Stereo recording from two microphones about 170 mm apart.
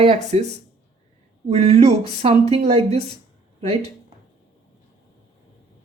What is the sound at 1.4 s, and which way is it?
Speech, 35° right (ahead or behind).